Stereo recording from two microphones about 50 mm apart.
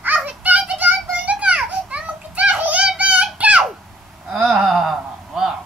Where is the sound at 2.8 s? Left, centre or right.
Right.